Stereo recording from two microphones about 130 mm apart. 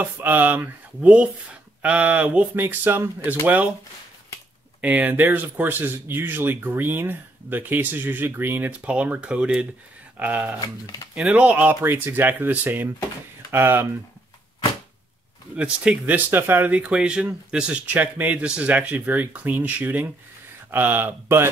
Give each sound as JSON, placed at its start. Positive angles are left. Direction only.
{"t": 0.0, "sound": "speech", "side_deg": -15}
{"t": 4.8, "sound": "speech", "side_deg": -10}
{"t": 10.6, "sound": "speech", "side_deg": 30}
{"t": 11.1, "sound": "speech", "side_deg": -10}
{"t": 15.5, "sound": "speech", "side_deg": -10}